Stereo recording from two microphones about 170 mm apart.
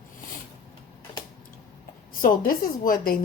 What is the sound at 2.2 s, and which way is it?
Speech, 55° left (ahead or behind).